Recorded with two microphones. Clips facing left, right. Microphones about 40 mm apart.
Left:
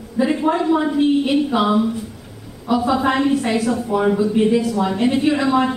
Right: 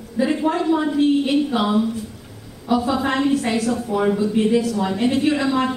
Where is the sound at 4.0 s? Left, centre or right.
Centre.